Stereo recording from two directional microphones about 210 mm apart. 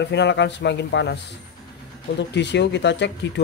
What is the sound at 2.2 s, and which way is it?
Speech, 55° left (ahead or behind).